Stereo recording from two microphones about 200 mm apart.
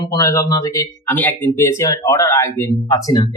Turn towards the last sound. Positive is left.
turn(degrees=20)  # may be behind; listen again after turning